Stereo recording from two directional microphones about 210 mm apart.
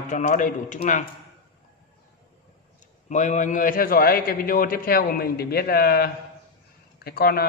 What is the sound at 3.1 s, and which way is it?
A man's voice, 35° left (ahead or behind).